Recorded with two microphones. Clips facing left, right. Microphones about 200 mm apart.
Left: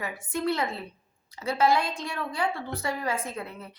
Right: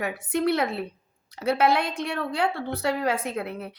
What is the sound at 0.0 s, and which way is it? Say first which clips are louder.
A woman's voice: right 5 dB; 65° right (ahead or behind).